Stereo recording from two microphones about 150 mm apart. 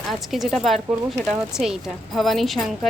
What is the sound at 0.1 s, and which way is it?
A woman's voice, centre (ahead or behind).